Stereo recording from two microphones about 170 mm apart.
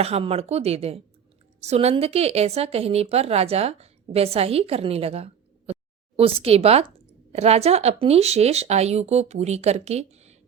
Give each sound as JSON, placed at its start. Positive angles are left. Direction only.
{"t": 0.0, "sound": "a woman's voice", "side_deg": -35}